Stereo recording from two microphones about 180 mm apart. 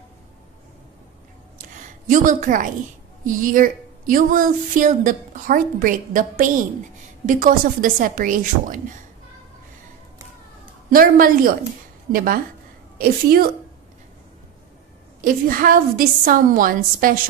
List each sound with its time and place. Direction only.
2.0 s speech: 45° right (ahead or behind)
10.9 s a woman's voice: 50° right (ahead or behind)
15.2 s speech: 50° right (ahead or behind)